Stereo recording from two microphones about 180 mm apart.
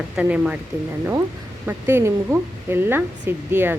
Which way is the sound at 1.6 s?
15° right (ahead or behind).